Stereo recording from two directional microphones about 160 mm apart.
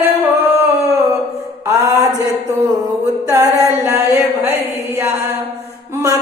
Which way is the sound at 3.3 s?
20° right (ahead or behind).